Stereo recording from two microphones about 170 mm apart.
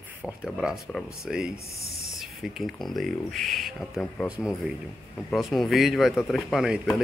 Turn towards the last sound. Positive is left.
turn(degrees=0)  # may be behind; listen again after turning